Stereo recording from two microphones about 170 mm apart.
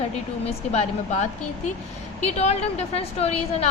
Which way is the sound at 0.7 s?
40° left (ahead or behind).